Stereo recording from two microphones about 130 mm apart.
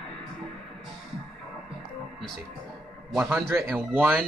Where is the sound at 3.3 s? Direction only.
20° right (ahead or behind).